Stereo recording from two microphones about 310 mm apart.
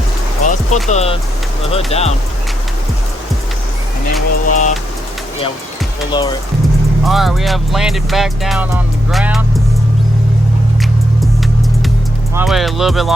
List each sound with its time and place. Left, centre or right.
0.4 s music: left
0.9 s speech: centre
4.4 s speech: left
6.1 s speech: centre
7.0 s speech: centre
12.3 s speech: centre